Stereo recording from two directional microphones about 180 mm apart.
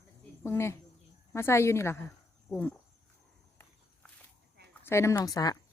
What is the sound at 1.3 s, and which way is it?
Speech, 15° left (ahead or behind).